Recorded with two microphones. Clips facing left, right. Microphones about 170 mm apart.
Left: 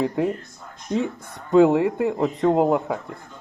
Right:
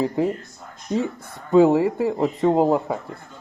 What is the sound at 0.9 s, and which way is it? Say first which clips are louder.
Speech: even; centre (ahead or behind).